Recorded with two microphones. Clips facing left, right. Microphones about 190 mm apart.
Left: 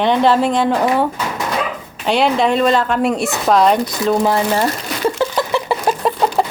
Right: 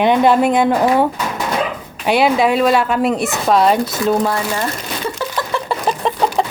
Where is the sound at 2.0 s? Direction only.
10° right (ahead or behind).